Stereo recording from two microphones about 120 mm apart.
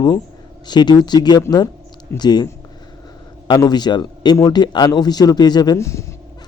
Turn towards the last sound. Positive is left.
turn(degrees=25)  # may be behind; listen again after turning